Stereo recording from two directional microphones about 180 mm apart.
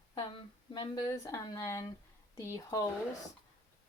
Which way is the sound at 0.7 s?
30° left (ahead or behind).